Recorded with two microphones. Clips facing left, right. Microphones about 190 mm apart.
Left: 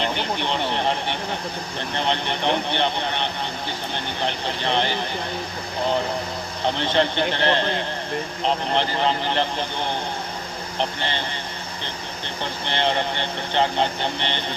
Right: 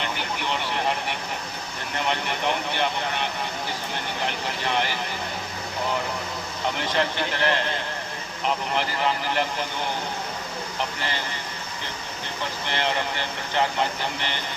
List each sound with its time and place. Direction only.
0.0 s speech: 30° left (ahead or behind)
6.7 s speech: 30° left (ahead or behind)
10.8 s speech: 30° left (ahead or behind)
12.6 s speech: 30° left (ahead or behind)